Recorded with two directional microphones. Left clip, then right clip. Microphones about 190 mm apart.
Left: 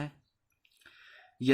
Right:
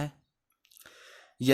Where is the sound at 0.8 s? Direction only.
55° right (ahead or behind).